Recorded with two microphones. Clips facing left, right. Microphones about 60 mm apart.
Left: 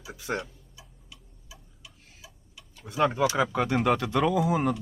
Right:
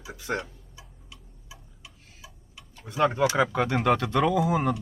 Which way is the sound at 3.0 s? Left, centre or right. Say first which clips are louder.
Right 1 dB; centre.